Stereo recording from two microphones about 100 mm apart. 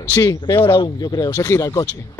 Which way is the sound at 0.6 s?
60° left (ahead or behind).